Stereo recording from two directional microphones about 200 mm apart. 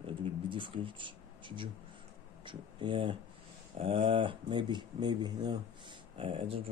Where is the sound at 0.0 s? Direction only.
25° right (ahead or behind).